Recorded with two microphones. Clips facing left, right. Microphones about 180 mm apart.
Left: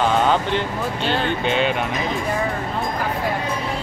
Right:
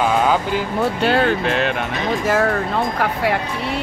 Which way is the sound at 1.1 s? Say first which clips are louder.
Right 3 dB; centre (ahead or behind).